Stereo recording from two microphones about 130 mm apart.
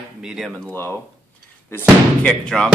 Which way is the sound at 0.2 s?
5° right (ahead or behind).